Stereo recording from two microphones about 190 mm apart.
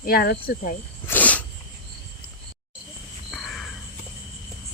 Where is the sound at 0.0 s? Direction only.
50° left (ahead or behind).